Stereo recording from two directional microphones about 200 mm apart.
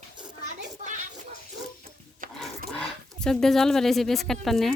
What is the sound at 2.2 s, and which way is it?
Wood, 45° right (ahead or behind).